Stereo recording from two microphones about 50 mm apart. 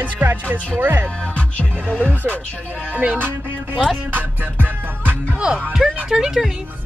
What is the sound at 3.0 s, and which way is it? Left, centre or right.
Music, right.